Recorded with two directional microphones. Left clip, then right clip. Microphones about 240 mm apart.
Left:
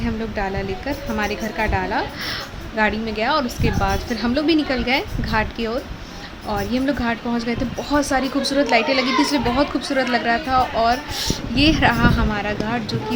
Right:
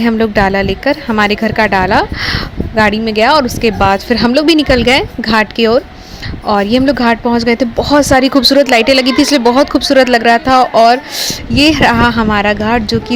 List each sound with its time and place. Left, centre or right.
0.0 s speech: right